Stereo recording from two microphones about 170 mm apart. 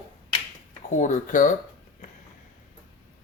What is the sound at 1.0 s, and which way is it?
Speech, 50° left (ahead or behind).